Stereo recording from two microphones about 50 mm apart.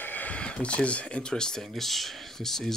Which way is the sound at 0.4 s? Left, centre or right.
Left.